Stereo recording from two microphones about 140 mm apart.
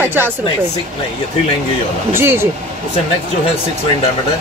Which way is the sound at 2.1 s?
20° right (ahead or behind).